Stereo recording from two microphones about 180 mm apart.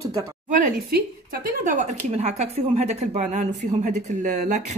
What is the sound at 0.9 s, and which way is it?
A woman's voice, 55° right (ahead or behind).